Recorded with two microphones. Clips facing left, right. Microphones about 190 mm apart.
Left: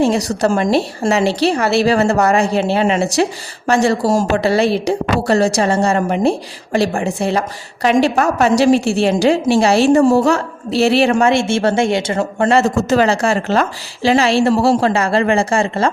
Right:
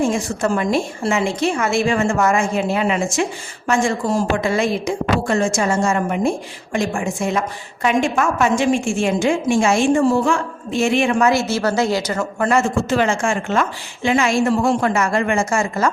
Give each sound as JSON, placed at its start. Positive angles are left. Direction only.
{"t": 0.0, "sound": "a woman's voice", "side_deg": 35}